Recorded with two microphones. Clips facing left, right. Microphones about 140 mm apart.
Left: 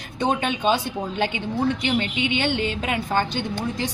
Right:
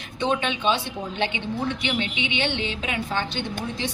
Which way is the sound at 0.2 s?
45° left (ahead or behind).